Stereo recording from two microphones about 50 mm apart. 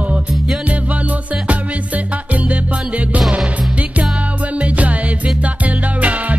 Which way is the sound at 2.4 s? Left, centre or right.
Right.